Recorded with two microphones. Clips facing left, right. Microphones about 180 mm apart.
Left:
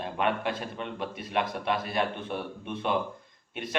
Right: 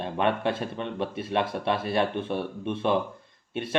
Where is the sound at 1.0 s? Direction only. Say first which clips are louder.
Right 3 dB; 25° right (ahead or behind).